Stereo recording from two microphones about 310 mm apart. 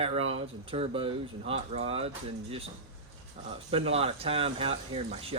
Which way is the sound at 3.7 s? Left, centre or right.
Centre.